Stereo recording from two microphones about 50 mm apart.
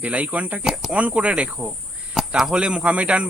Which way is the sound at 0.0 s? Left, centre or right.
Right.